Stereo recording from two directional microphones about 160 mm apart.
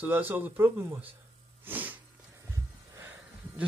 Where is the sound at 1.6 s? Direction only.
10° right (ahead or behind).